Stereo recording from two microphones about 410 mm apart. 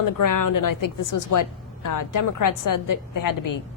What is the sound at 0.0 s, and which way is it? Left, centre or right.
Speech, left.